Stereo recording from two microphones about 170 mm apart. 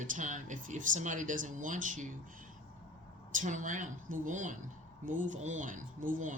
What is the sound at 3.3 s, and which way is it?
Speech, 50° right (ahead or behind).